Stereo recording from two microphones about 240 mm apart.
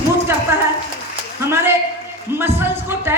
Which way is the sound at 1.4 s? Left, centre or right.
Centre.